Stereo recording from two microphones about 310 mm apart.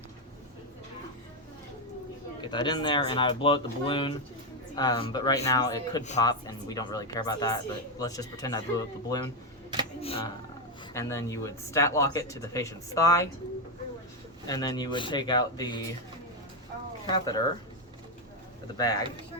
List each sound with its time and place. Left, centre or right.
2.5 s speech: centre
14.4 s speech: centre
17.1 s speech: centre
18.8 s speech: centre